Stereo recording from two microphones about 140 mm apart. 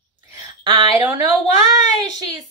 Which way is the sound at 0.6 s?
35° right (ahead or behind).